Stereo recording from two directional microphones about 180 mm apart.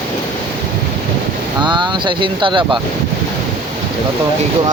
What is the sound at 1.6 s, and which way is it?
Speech, 25° right (ahead or behind).